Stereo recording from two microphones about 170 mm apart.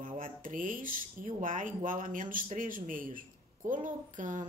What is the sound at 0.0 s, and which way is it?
Speech, 55° right (ahead or behind).